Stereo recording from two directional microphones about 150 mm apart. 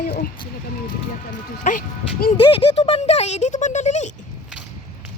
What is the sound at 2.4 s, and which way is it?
Speech, 35° left (ahead or behind).